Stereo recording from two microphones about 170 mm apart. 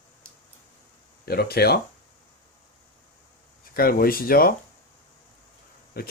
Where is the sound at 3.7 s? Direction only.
60° left (ahead or behind).